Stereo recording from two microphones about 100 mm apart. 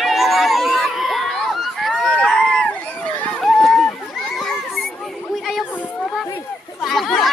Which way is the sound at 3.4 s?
Centre (ahead or behind).